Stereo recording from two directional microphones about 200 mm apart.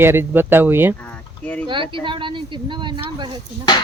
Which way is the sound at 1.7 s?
25° right (ahead or behind).